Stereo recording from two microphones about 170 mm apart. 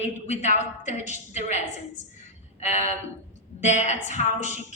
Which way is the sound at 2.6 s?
45° left (ahead or behind).